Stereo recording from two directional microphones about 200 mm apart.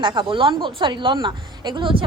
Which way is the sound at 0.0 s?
25° right (ahead or behind).